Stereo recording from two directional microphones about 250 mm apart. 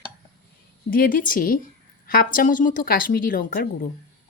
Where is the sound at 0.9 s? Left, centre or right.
Left.